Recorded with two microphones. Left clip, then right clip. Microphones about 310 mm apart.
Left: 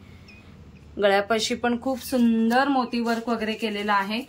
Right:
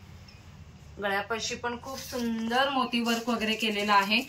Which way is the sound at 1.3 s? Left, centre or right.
Left.